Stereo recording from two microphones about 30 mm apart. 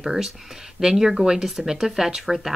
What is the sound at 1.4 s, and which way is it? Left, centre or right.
Speech, centre.